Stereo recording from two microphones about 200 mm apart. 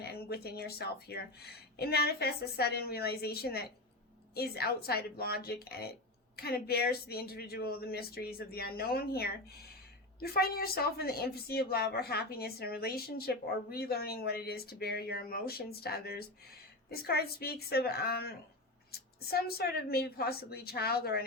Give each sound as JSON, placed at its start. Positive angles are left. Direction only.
{"t": 0.0, "sound": "a woman's voice", "side_deg": 50}